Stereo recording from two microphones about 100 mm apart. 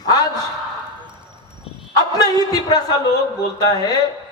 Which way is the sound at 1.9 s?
40° left (ahead or behind).